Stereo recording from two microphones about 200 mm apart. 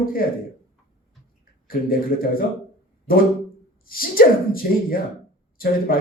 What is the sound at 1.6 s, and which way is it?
Speech, 45° left (ahead or behind).